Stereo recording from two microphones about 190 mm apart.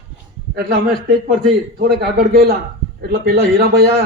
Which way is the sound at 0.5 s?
55° right (ahead or behind).